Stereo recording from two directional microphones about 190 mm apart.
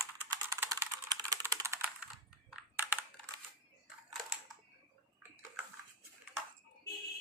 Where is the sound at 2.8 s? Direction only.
10° right (ahead or behind).